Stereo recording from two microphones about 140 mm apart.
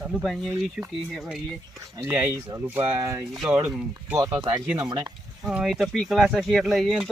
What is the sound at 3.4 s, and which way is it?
Speech, 10° right (ahead or behind).